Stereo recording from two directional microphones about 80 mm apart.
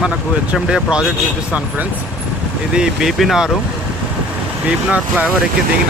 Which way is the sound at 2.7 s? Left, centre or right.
Centre.